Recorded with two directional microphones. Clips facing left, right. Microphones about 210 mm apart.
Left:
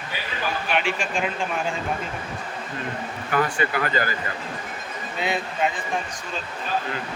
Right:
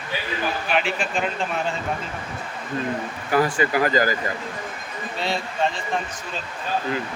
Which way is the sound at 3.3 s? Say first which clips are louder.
Right 4 dB; 35° right (ahead or behind).